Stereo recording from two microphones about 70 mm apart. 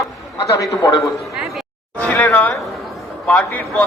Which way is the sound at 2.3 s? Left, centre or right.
Left.